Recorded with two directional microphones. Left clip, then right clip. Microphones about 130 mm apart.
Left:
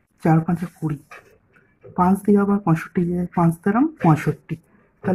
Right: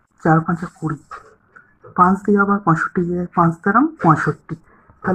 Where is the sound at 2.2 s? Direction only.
40° left (ahead or behind).